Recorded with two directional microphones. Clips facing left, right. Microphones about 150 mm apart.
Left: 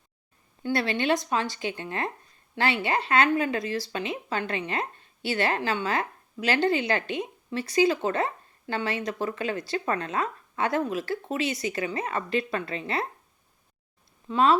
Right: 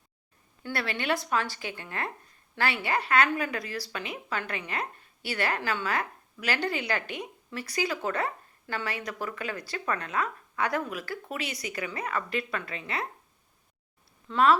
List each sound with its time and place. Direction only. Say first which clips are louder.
0.6 s speech: left 6 dB; 25° left (ahead or behind)
14.3 s speech: left 1 dB; 20° left (ahead or behind)